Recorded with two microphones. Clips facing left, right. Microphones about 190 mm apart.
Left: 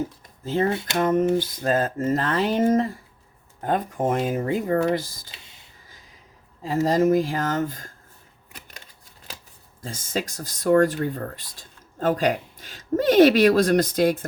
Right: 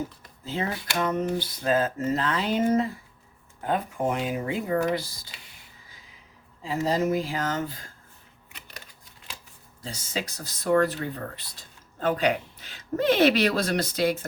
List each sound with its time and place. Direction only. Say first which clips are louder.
0.7 s a sound: left 6 dB; 25° left (ahead or behind)
0.9 s speech: left 6 dB; 45° left (ahead or behind)
6.6 s speech: left 5 dB; 45° left (ahead or behind)
9.8 s speech: left 4 dB; 50° left (ahead or behind)